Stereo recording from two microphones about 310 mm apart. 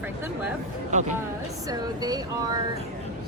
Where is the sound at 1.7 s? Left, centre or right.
Centre.